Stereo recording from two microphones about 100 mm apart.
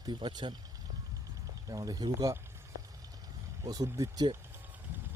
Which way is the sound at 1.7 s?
40° right (ahead or behind).